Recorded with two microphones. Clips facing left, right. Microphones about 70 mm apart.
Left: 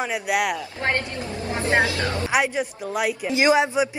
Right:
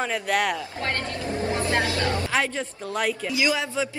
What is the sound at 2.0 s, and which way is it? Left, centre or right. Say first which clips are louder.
Speech: right 1 dB; left.